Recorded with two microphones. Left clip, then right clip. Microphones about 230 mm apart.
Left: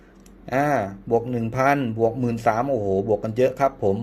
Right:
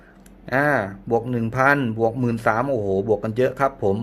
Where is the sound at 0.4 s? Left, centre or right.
Centre.